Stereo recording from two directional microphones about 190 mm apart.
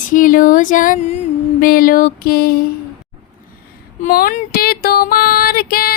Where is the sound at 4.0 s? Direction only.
45° left (ahead or behind).